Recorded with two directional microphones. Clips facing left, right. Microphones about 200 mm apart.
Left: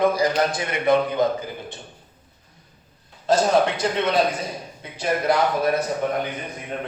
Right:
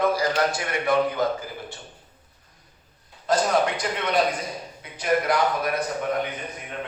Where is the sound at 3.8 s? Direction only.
30° left (ahead or behind).